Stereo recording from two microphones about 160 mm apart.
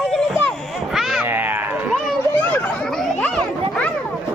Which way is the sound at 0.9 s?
Centre (ahead or behind).